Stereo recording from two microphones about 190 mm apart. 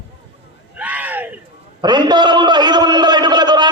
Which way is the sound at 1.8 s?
25° right (ahead or behind).